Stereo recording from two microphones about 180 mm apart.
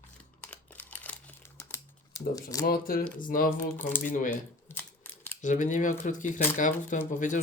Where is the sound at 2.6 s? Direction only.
55° left (ahead or behind).